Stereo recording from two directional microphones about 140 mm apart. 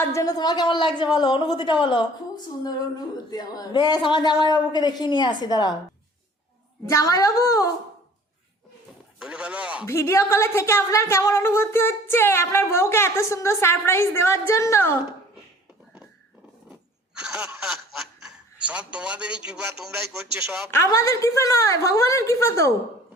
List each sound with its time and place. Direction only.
0.0 s a woman's voice: 20° left (ahead or behind)
6.8 s a woman's voice: 25° left (ahead or behind)
9.1 s speech: 5° right (ahead or behind)
9.8 s a woman's voice: 20° left (ahead or behind)
17.2 s snicker: 5° right (ahead or behind)
20.0 s speech: 5° right (ahead or behind)
20.7 s a woman's voice: 20° left (ahead or behind)